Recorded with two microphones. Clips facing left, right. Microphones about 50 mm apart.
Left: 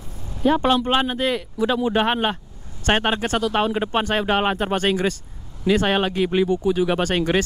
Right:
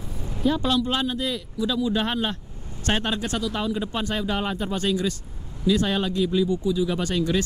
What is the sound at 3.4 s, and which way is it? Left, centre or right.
Speech, left.